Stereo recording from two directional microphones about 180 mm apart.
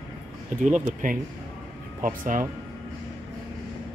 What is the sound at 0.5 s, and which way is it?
Speech, 45° right (ahead or behind).